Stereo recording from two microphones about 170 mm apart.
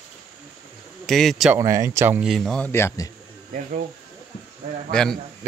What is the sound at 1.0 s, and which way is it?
Speech, centre (ahead or behind).